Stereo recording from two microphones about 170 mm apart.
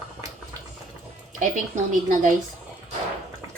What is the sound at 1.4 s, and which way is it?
Speech, 50° right (ahead or behind).